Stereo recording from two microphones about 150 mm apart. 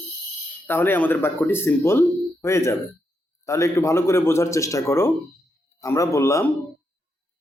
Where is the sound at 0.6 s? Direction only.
15° left (ahead or behind).